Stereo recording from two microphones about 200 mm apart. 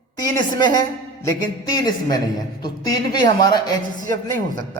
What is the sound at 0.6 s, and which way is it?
A man's voice, 20° left (ahead or behind).